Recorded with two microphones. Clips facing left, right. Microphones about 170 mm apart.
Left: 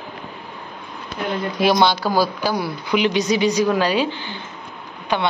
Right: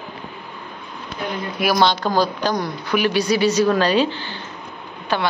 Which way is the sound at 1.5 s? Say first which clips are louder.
Left 2 dB; 25° left (ahead or behind).